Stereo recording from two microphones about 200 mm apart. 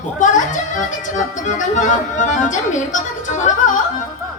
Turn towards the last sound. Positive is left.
turn(degrees=35)  # may be behind; listen again after turning